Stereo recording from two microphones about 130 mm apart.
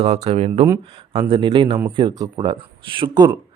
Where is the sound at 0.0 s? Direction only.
50° right (ahead or behind).